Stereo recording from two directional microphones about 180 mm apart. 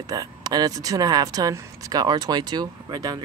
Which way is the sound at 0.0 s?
20° right (ahead or behind).